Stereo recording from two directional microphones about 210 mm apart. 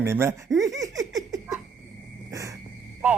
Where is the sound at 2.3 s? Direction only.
15° right (ahead or behind).